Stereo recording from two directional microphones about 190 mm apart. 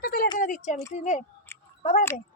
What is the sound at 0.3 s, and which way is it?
Speech, 45° left (ahead or behind).